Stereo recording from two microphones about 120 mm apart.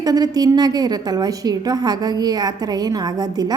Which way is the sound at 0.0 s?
35° right (ahead or behind).